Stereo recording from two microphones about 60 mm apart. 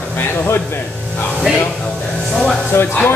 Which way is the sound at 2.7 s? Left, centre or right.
Left.